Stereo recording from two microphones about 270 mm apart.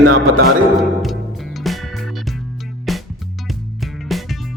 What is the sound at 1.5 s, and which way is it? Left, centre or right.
Music, centre.